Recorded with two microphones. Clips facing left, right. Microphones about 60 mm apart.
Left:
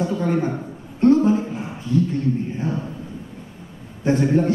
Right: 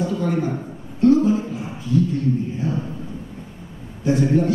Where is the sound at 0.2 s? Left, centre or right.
Left.